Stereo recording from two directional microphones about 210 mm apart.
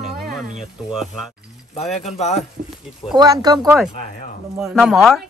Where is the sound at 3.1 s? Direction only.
20° right (ahead or behind).